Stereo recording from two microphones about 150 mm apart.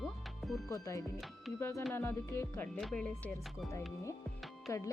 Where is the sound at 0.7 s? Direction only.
20° left (ahead or behind).